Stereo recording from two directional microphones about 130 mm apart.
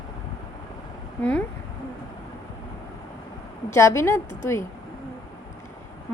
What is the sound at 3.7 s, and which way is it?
Speech, 20° left (ahead or behind).